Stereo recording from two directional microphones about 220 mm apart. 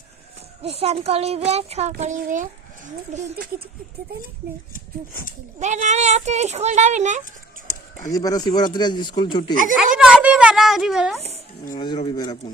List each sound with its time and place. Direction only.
0.6 s a child's voice: 25° right (ahead or behind)
4.7 s speech: 40° left (ahead or behind)
5.5 s speech: 35° right (ahead or behind)
7.7 s speech: 15° left (ahead or behind)
9.7 s a child's voice: 5° right (ahead or behind)
11.8 s speech: 20° left (ahead or behind)